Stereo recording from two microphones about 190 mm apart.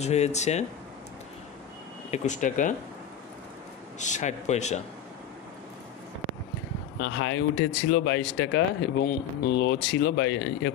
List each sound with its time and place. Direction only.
0.0 s speech: 35° left (ahead or behind)
2.0 s speech: 40° left (ahead or behind)
4.0 s speech: 40° left (ahead or behind)
7.0 s speech: 85° left
7.9 s speech: 65° left (ahead or behind)